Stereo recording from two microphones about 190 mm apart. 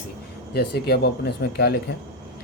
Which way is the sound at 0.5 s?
60° left (ahead or behind).